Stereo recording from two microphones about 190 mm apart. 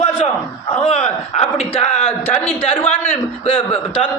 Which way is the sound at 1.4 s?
30° left (ahead or behind).